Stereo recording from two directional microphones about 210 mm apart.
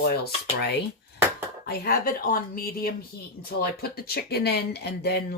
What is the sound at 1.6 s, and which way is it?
Speech, 45° left (ahead or behind).